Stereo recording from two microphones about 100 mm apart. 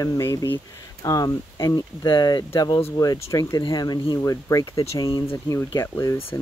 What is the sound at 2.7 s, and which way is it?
Speech, 25° left (ahead or behind).